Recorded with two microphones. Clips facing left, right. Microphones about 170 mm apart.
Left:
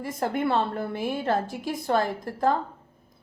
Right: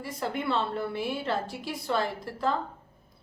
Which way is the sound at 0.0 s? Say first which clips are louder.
Left 5 dB; 50° left (ahead or behind).